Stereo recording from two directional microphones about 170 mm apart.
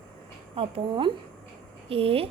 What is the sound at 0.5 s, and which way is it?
A woman's voice, 30° right (ahead or behind).